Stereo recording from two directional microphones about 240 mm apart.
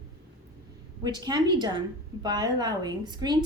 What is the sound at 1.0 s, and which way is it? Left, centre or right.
A woman's voice, centre.